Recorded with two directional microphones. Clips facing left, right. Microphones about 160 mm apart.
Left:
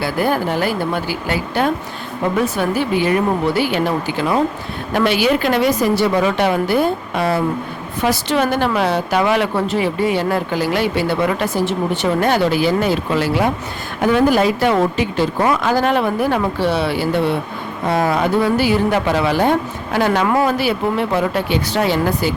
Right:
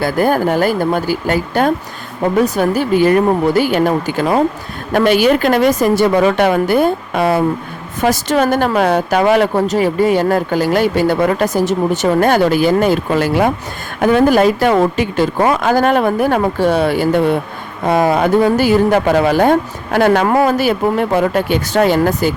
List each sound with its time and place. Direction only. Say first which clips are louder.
0.0 s speech: right 4 dB; 45° right (ahead or behind)